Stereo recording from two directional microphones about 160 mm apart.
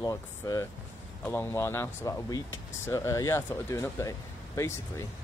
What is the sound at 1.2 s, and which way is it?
Speech, 10° left (ahead or behind).